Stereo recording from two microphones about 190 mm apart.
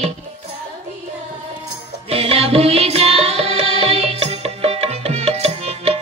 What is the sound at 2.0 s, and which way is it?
Music, 30° right (ahead or behind).